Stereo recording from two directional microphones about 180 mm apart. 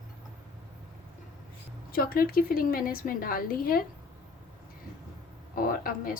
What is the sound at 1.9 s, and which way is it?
A woman's voice, 55° left (ahead or behind).